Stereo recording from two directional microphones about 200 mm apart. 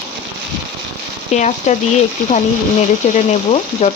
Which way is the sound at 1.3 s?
35° left (ahead or behind).